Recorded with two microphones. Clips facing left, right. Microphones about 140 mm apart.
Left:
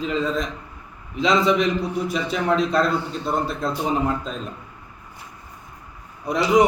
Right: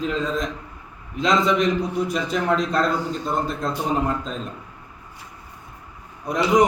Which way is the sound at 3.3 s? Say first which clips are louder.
Left 2 dB; centre (ahead or behind).